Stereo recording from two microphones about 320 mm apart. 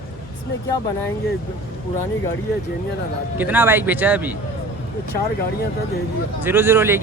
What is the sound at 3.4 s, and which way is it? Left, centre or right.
Speech, centre.